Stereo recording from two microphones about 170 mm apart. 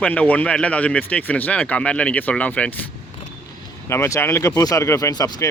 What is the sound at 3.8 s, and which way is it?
Speech, 15° left (ahead or behind).